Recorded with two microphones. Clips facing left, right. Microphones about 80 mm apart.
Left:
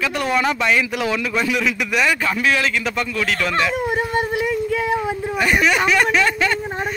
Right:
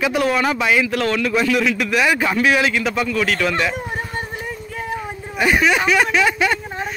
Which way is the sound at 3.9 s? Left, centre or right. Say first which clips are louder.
Left 6 dB; left.